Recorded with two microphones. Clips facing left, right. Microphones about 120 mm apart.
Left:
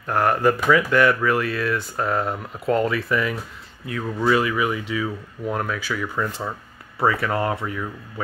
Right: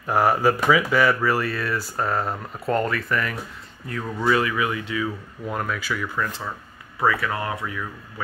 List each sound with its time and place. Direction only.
0.0 s speech: 5° right (ahead or behind)
7.0 s speech: 30° left (ahead or behind)